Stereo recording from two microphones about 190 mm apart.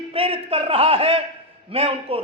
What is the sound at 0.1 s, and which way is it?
A man's voice, 30° right (ahead or behind).